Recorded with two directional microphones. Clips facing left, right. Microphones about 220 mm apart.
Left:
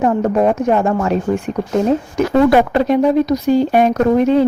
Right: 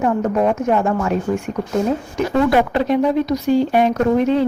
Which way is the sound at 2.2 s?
40° left (ahead or behind).